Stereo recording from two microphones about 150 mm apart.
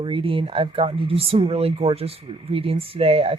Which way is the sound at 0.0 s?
35° right (ahead or behind).